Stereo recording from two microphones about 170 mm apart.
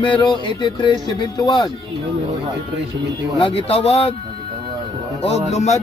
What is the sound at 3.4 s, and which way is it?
Music, 30° left (ahead or behind).